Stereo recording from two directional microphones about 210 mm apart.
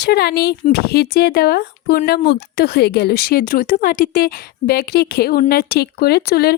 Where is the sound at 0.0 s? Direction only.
50° left (ahead or behind).